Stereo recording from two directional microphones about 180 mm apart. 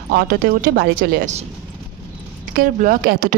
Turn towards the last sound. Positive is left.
turn(degrees=-50)  # may be behind; listen again after turning